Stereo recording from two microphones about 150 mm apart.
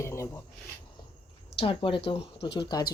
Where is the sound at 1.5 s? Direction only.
35° left (ahead or behind).